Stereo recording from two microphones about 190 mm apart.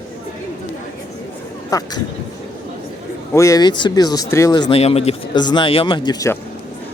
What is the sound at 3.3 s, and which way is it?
Speech, 15° left (ahead or behind).